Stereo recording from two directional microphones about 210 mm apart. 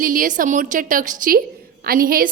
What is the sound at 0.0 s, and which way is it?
A woman's voice, 40° right (ahead or behind).